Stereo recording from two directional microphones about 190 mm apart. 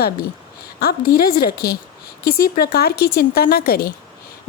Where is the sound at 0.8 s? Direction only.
55° left (ahead or behind).